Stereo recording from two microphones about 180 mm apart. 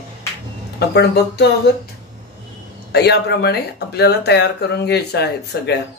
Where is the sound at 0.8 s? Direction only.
70° left (ahead or behind).